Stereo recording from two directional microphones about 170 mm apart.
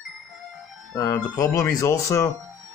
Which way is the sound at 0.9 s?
20° left (ahead or behind).